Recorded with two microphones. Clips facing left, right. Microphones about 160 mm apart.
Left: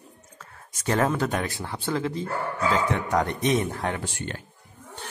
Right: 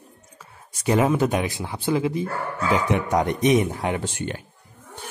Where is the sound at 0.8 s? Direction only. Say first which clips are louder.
Right 4 dB; 10° right (ahead or behind).